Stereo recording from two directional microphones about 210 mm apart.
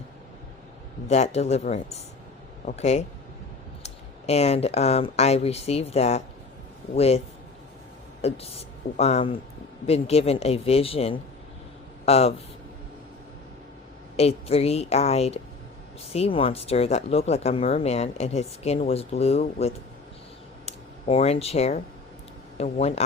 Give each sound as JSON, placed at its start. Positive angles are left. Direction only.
{"t": 1.0, "sound": "speech", "side_deg": 30}
{"t": 8.2, "sound": "speech", "side_deg": 30}
{"t": 14.2, "sound": "speech", "side_deg": 30}